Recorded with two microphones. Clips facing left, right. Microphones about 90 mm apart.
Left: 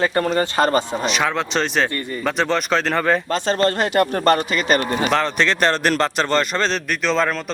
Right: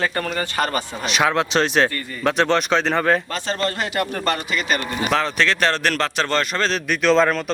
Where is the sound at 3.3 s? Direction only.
35° left (ahead or behind).